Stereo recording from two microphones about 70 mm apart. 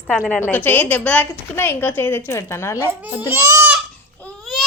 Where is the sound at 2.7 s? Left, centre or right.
Right.